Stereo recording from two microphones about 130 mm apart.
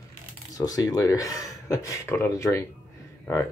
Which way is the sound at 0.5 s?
30° left (ahead or behind).